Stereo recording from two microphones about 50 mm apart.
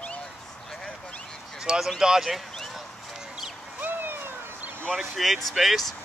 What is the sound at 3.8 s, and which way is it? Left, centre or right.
Vehicle, right.